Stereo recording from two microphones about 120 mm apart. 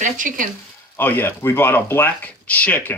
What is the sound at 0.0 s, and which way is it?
Speech, 90° right.